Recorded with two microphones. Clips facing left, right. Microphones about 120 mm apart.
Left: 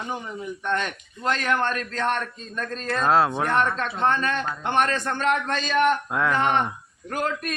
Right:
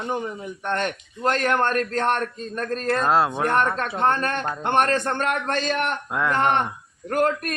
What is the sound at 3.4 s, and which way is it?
A man's voice, 50° right (ahead or behind).